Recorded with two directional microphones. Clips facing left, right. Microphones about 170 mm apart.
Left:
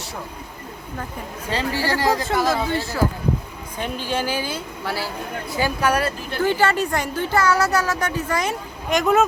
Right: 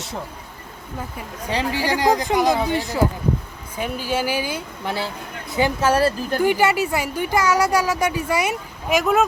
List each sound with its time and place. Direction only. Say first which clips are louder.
1.5 s speech: right 1 dB; 15° right (ahead or behind)
6.4 s speech: right 1 dB; 10° right (ahead or behind)